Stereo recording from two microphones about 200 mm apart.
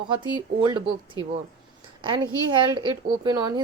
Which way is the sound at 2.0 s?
25° right (ahead or behind).